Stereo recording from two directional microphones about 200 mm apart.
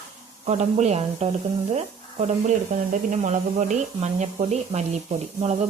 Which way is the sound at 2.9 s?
40° right (ahead or behind).